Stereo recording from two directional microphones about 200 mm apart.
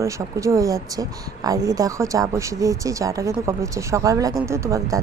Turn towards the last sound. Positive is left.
turn(degrees=-15)  # may be behind; listen again after turning